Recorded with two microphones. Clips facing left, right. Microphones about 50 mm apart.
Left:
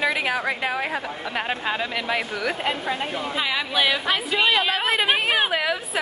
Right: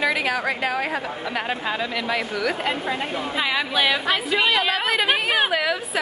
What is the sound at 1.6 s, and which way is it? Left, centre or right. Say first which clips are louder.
Speech: even; left.